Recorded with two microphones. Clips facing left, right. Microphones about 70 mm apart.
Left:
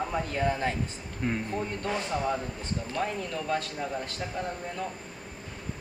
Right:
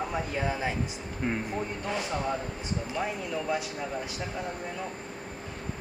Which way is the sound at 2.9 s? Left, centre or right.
Centre.